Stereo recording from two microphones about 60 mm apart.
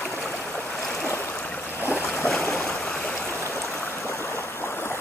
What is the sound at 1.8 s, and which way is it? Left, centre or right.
Boat, left.